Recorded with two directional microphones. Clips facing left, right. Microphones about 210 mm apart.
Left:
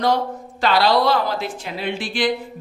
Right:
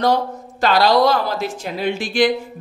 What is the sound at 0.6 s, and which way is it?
A woman's voice, 45° right (ahead or behind).